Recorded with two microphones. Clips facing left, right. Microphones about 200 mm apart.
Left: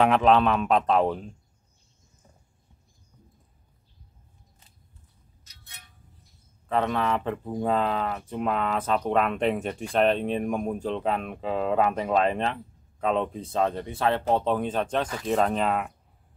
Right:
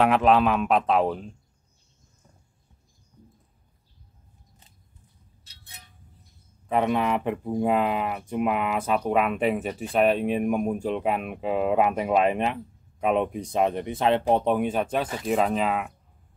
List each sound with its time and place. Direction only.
0.0 s speech: 5° right (ahead or behind)
5.4 s a sound: 30° right (ahead or behind)
6.7 s speech: 15° right (ahead or behind)